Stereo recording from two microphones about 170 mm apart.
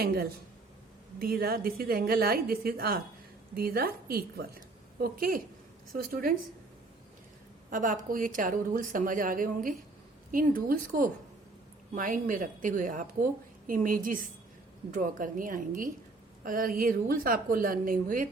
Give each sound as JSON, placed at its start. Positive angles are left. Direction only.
{"t": 0.0, "sound": "a woman's voice", "side_deg": -60}
{"t": 7.7, "sound": "a woman's voice", "side_deg": -50}